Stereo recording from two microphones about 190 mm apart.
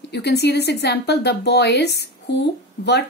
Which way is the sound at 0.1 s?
60° left (ahead or behind).